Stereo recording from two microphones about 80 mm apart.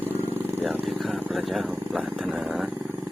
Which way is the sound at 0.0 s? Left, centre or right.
Right.